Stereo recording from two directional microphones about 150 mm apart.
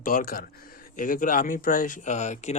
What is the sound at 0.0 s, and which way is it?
Speech, 70° left (ahead or behind).